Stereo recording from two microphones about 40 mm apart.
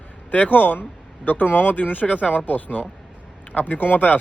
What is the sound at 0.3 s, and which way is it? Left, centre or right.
Speech, left.